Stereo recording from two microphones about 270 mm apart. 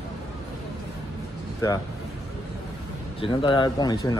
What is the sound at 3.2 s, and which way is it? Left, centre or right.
Speech, centre.